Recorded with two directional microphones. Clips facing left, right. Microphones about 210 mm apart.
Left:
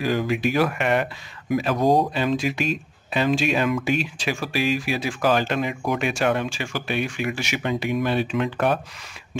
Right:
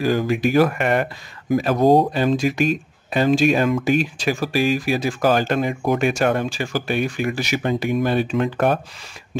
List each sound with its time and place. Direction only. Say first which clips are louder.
0.0 s speech: right 3 dB; 45° right (ahead or behind)